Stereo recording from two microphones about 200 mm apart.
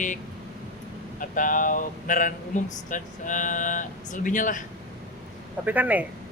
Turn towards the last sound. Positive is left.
turn(degrees=-10)  # may be behind; listen again after turning